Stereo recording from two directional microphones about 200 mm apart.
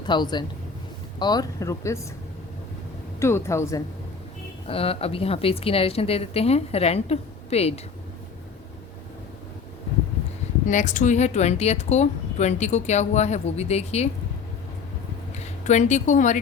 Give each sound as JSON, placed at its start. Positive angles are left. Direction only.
{"t": 0.0, "sound": "a man's voice", "side_deg": 20}
{"t": 3.2, "sound": "speech", "side_deg": 15}
{"t": 4.6, "sound": "a woman's voice", "side_deg": 30}
{"t": 10.7, "sound": "a woman's voice", "side_deg": 40}
{"t": 15.4, "sound": "speech", "side_deg": 35}